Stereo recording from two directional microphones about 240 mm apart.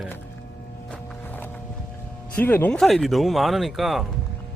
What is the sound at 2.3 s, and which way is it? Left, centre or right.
Speech, centre.